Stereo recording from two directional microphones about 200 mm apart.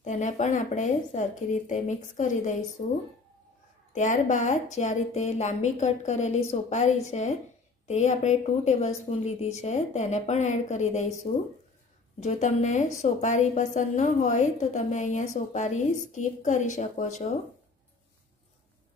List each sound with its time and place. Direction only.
0.0 s a woman's voice: 35° left (ahead or behind)
12.2 s a woman's voice: 35° left (ahead or behind)